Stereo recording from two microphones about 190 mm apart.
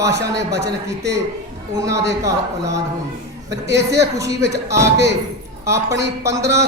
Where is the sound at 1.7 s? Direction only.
15° right (ahead or behind).